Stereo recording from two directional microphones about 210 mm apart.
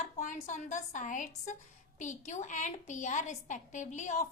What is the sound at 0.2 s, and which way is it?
A woman's voice, 35° left (ahead or behind).